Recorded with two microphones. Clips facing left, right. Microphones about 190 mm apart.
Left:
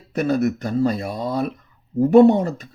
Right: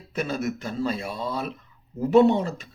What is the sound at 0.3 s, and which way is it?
Speech, 45° left (ahead or behind).